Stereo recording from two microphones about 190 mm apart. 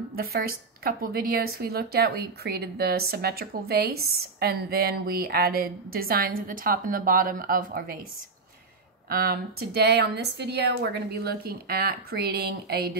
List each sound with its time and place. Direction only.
0.1 s a woman's voice: 50° right (ahead or behind)
9.1 s a woman's voice: 50° right (ahead or behind)